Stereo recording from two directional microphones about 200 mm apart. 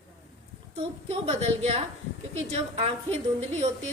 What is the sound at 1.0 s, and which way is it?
A woman's voice, 30° right (ahead or behind).